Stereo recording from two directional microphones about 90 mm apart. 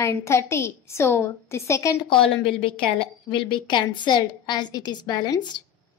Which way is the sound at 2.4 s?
85° left.